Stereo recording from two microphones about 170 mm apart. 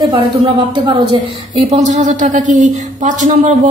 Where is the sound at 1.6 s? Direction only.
40° right (ahead or behind).